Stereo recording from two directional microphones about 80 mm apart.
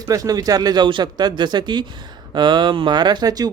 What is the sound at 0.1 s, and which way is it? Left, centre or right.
Speech, right.